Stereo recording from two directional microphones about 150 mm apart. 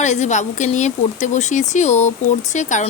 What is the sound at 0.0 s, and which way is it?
Speech, 50° left (ahead or behind).